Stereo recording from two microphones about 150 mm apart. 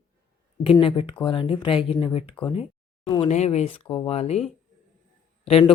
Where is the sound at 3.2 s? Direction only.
50° left (ahead or behind).